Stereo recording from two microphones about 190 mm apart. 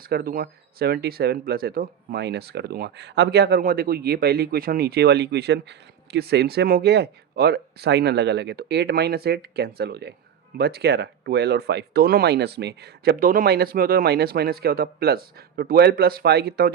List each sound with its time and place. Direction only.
0.0 s speech: 50° right (ahead or behind)